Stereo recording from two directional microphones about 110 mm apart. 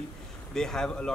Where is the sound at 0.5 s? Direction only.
5° left (ahead or behind).